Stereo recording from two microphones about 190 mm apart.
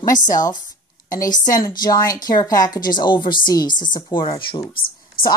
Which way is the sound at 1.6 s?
20° left (ahead or behind).